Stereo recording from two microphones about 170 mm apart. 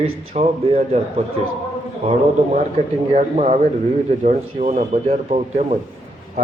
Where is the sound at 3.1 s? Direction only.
40° right (ahead or behind).